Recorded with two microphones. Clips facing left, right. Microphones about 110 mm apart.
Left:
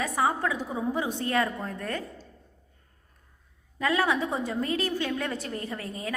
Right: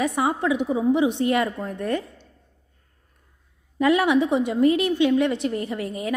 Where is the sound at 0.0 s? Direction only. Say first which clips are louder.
Right 4 dB; 25° right (ahead or behind).